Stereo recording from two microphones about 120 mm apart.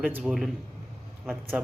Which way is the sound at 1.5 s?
10° right (ahead or behind).